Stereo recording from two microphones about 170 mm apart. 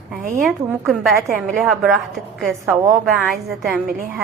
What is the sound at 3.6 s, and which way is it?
Speech, 5° right (ahead or behind).